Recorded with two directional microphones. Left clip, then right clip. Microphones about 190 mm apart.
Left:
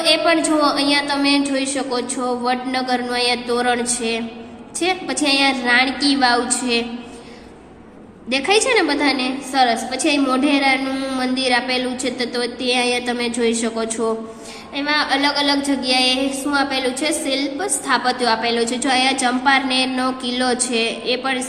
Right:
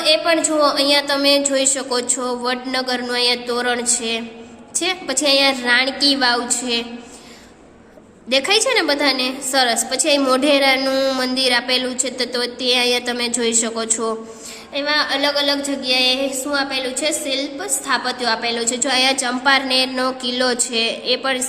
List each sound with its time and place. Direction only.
0.0 s a woman's voice: 15° right (ahead or behind)
8.3 s a woman's voice: 25° right (ahead or behind)